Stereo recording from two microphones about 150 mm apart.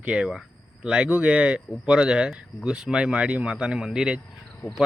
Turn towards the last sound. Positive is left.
turn(degrees=5)  # may be behind; listen again after turning